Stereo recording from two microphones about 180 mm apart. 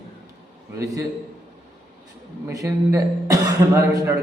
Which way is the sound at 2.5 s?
20° right (ahead or behind).